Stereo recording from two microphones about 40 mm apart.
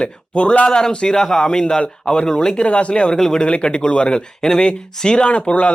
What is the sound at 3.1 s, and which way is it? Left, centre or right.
Speech, centre.